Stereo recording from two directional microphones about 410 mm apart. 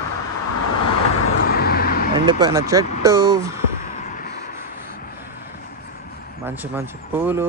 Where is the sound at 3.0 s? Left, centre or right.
Centre.